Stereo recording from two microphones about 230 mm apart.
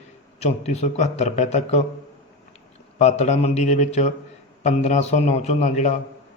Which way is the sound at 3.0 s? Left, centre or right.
Left.